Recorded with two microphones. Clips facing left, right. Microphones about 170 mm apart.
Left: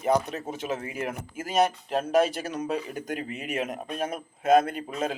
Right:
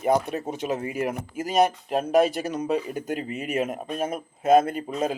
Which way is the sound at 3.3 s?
45° right (ahead or behind).